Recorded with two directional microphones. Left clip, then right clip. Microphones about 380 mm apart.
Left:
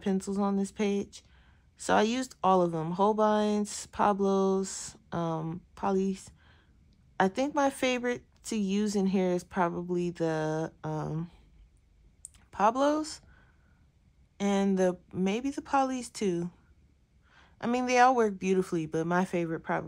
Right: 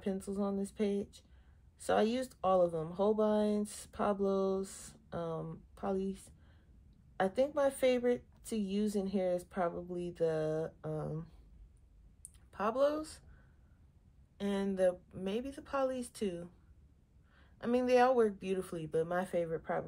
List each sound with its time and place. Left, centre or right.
0.0 s a woman's voice: centre
12.4 s speech: centre
14.3 s a woman's voice: centre